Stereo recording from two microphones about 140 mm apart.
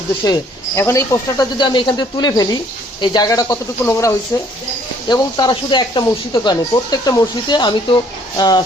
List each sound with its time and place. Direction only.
0.2 s speech: 25° left (ahead or behind)
1.5 s speech: 35° left (ahead or behind)